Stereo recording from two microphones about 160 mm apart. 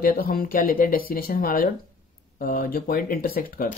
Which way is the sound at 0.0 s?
65° left (ahead or behind).